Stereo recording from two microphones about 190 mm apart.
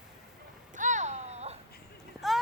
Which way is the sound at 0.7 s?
40° right (ahead or behind).